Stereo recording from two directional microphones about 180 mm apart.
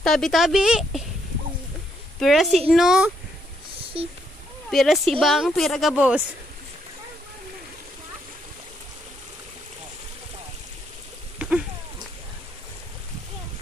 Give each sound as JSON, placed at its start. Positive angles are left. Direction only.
{"t": 0.0, "sound": "speech", "side_deg": 0}
{"t": 2.1, "sound": "speech", "side_deg": 0}
{"t": 3.9, "sound": "speech", "side_deg": -30}
{"t": 4.6, "sound": "speech", "side_deg": 0}
{"t": 11.3, "sound": "a sound", "side_deg": -5}